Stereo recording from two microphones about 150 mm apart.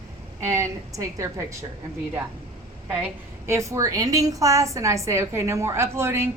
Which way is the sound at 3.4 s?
20° right (ahead or behind).